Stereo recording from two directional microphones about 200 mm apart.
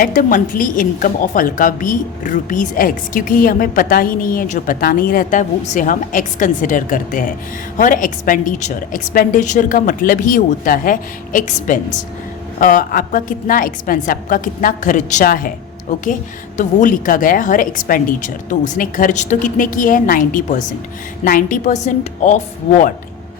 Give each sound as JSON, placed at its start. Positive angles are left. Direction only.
{"t": 0.0, "sound": "a woman's voice", "side_deg": 45}